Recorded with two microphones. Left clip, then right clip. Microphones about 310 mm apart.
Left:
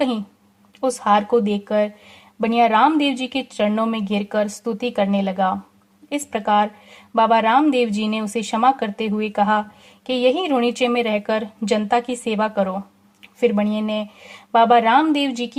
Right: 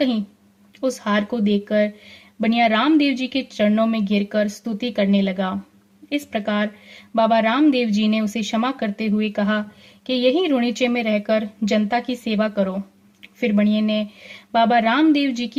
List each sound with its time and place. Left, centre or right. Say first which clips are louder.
0.8 s a woman's voice: left 4 dB; centre